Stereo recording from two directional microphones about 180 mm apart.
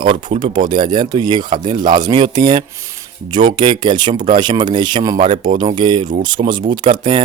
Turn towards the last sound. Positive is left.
turn(degrees=-25)  # may be behind; listen again after turning